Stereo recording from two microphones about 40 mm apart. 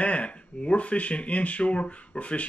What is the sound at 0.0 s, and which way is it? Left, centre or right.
Speech, left.